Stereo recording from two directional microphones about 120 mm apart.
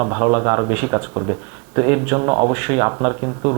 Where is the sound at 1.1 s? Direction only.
35° right (ahead or behind).